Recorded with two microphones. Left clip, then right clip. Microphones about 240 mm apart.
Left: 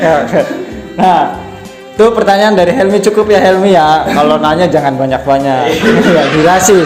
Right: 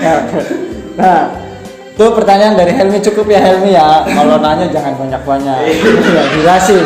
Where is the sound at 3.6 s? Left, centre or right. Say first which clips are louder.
Right 1 dB; left.